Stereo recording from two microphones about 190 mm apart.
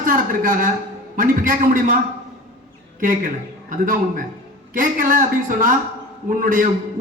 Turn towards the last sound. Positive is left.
turn(degrees=-45)  # may be behind; listen again after turning